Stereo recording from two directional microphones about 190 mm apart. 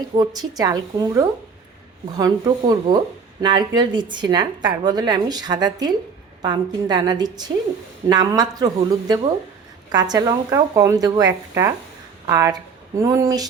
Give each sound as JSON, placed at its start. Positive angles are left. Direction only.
{"t": 0.2, "sound": "a woman's voice", "side_deg": -20}